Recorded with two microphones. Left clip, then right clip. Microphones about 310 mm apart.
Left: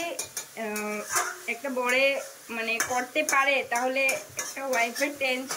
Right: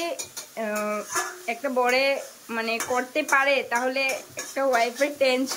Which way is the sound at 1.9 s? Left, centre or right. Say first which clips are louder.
Right 1 dB; centre.